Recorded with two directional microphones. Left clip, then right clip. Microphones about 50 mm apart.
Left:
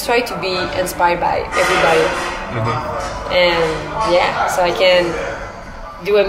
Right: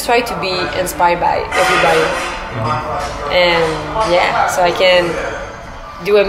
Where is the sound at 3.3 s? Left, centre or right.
Centre.